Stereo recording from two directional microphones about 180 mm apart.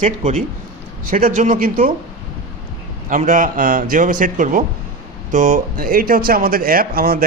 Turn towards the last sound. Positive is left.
turn(degrees=-55)  # may be behind; listen again after turning